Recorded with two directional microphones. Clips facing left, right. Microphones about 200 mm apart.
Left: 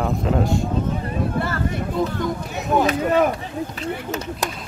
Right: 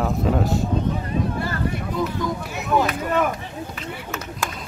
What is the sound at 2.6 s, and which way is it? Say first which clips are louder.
Speech: left 3 dB; 40° left (ahead or behind).